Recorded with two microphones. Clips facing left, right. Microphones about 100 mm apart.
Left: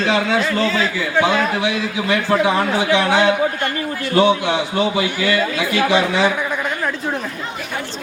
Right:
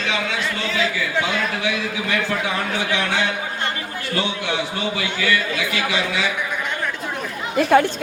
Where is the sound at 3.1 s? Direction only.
60° left (ahead or behind).